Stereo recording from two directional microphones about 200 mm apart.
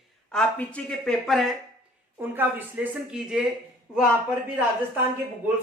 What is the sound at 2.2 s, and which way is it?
A woman's voice, 10° right (ahead or behind).